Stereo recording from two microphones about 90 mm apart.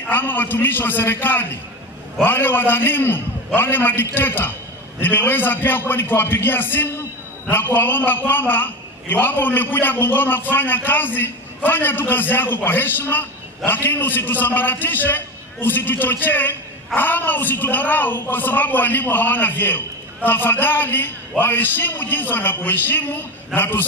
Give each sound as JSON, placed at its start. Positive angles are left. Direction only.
{"t": 0.1, "sound": "a man's voice", "side_deg": 20}